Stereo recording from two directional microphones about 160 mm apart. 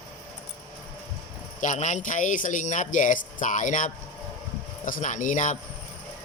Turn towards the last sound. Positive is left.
turn(degrees=50)  # may be behind; listen again after turning